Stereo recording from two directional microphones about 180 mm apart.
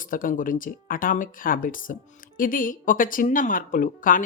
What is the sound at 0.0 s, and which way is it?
Speech, 50° left (ahead or behind).